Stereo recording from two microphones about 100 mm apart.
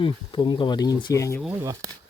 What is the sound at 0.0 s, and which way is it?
Speech, 55° left (ahead or behind).